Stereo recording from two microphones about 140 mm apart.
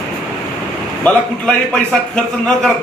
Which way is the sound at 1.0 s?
10° left (ahead or behind).